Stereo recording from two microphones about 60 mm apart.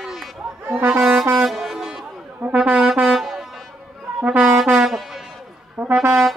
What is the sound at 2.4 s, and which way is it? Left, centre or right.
Speech, right.